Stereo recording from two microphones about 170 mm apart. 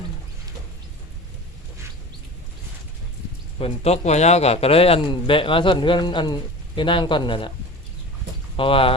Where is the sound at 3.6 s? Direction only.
35° left (ahead or behind).